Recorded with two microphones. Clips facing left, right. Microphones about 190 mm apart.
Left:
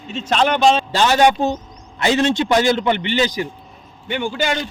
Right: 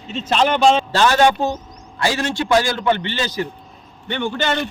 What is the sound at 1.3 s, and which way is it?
Speech, 10° right (ahead or behind).